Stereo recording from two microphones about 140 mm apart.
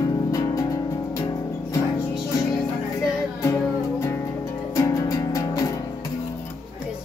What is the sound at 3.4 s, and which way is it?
Music, 20° left (ahead or behind).